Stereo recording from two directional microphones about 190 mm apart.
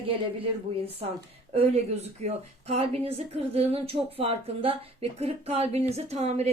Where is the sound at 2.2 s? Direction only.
35° right (ahead or behind).